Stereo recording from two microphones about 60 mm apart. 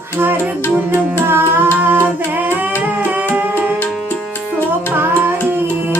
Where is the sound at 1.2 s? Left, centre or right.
Right.